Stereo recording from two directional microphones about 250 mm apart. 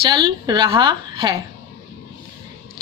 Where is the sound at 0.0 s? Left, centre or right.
Centre.